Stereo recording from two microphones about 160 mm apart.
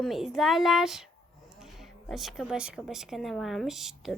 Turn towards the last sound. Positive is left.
turn(degrees=0)  # may be behind; listen again after turning